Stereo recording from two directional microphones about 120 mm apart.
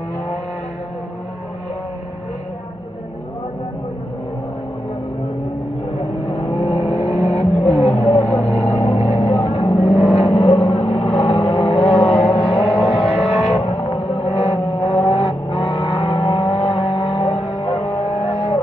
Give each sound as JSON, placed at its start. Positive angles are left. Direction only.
{"t": 6.2, "sound": "vehicle", "side_deg": 50}